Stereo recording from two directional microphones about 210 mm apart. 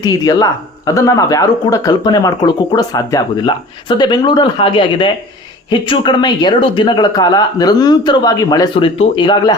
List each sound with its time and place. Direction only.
0.0 s speech: 15° left (ahead or behind)